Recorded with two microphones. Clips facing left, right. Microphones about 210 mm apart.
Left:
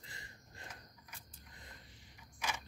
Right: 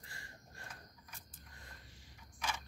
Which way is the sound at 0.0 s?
20° left (ahead or behind).